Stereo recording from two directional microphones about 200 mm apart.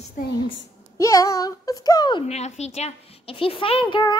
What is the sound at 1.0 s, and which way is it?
A child's voice, 15° left (ahead or behind).